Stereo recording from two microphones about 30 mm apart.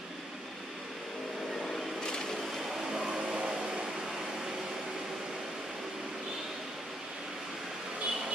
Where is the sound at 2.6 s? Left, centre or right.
Centre.